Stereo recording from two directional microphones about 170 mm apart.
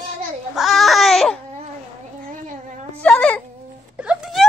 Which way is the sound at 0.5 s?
Centre (ahead or behind).